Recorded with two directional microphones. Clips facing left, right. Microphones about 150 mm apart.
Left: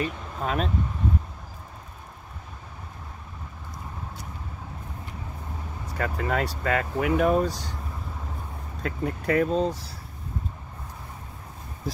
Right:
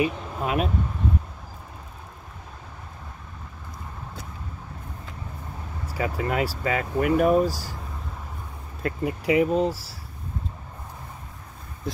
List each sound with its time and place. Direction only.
0.0 s speech: 10° right (ahead or behind)
5.9 s speech: 5° right (ahead or behind)
8.8 s speech: 10° right (ahead or behind)